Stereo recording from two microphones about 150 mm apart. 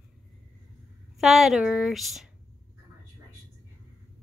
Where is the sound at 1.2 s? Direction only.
Centre (ahead or behind).